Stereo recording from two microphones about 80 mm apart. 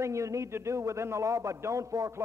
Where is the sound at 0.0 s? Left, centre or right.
Right.